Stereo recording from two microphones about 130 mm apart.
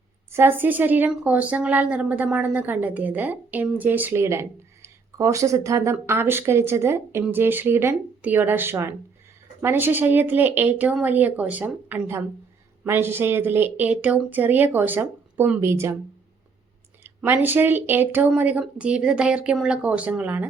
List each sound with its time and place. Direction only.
0.3 s speech: 15° right (ahead or behind)
17.0 s speech: 15° right (ahead or behind)